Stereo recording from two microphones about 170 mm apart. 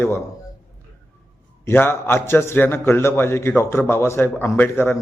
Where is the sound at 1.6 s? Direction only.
15° left (ahead or behind).